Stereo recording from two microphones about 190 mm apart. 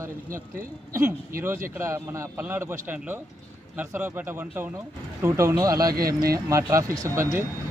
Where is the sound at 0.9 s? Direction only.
15° right (ahead or behind).